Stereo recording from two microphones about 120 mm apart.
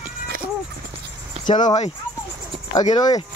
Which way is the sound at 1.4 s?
90° left.